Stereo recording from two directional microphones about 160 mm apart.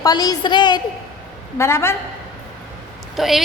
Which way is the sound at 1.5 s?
15° left (ahead or behind).